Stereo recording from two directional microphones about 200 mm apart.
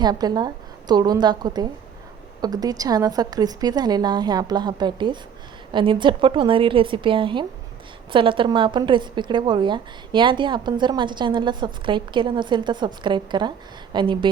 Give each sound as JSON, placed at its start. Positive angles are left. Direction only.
{"t": 0.0, "sound": "a woman's voice", "side_deg": -20}